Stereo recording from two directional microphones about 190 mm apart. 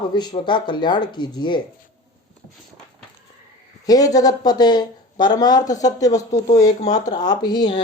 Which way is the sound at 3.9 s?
20° left (ahead or behind).